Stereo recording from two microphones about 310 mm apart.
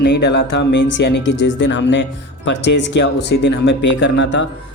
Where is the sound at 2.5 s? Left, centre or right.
Left.